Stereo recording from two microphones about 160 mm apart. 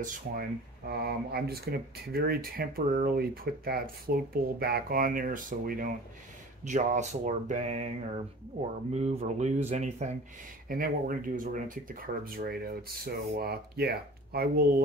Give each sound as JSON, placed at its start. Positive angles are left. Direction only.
{"t": 0.0, "sound": "speech", "side_deg": -70}
{"t": 6.6, "sound": "speech", "side_deg": -50}
{"t": 8.9, "sound": "speech", "side_deg": -45}
{"t": 10.7, "sound": "speech", "side_deg": -60}